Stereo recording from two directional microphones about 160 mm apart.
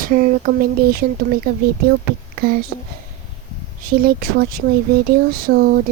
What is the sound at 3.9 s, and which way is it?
Speech, 70° right (ahead or behind).